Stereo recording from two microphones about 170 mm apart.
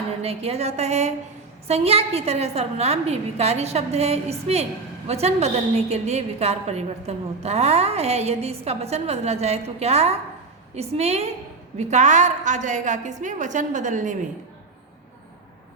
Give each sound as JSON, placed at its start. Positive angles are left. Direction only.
{"t": 0.2, "sound": "a woman's voice", "side_deg": -35}